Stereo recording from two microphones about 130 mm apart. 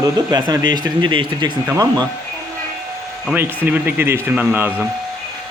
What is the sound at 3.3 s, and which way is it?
Speech, 15° right (ahead or behind).